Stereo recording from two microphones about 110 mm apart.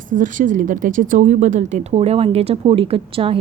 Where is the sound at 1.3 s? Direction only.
90° right.